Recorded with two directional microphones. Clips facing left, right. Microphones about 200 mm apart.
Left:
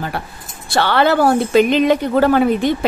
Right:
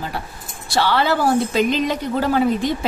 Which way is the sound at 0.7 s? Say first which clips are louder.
Left 4 dB; 60° left (ahead or behind).